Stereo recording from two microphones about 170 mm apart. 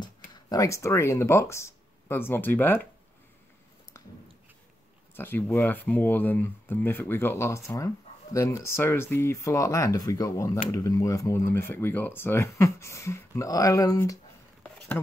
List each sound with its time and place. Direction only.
0.3 s speech: 20° left (ahead or behind)
5.1 s speech: 10° left (ahead or behind)